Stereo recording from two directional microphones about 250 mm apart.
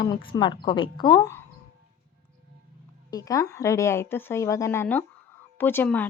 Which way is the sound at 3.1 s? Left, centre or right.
Centre.